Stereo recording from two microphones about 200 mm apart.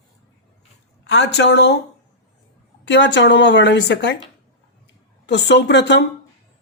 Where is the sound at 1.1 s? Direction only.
60° left (ahead or behind).